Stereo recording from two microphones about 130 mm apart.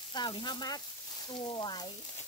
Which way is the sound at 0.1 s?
35° left (ahead or behind).